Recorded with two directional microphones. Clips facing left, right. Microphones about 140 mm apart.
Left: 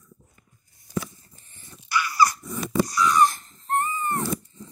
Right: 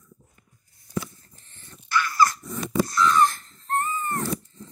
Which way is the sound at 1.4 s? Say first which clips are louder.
Even; 10° left (ahead or behind).